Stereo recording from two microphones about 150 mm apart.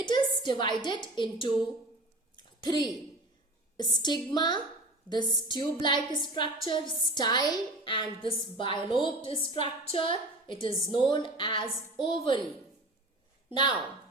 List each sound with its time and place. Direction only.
0.0 s a woman's voice: 30° left (ahead or behind)
2.3 s a sound: 30° left (ahead or behind)
3.8 s a woman's voice: 30° left (ahead or behind)
13.5 s a woman's voice: 30° left (ahead or behind)